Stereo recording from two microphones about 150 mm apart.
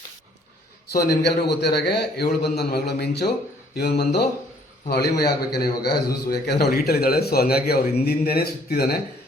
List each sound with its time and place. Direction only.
1.2 s a man's voice: 90° left